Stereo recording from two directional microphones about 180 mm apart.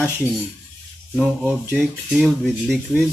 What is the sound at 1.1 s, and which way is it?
Speech, 5° right (ahead or behind).